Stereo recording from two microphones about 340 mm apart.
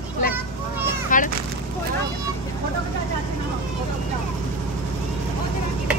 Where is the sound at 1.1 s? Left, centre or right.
Left.